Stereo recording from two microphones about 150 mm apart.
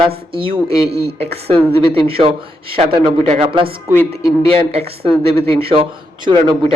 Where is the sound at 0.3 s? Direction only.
35° right (ahead or behind).